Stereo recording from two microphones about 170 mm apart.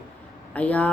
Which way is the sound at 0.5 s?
10° left (ahead or behind).